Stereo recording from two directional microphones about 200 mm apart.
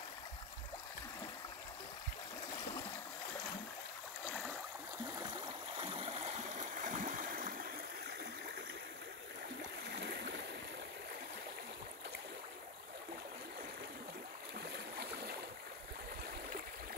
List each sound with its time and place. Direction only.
5.8 s stream: 25° right (ahead or behind); by 7.6 s 45° right (ahead or behind)
9.9 s stream: 55° right (ahead or behind)
15.0 s boat: 55° right (ahead or behind)